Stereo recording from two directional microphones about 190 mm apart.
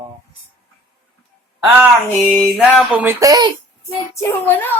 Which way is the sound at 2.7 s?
10° right (ahead or behind).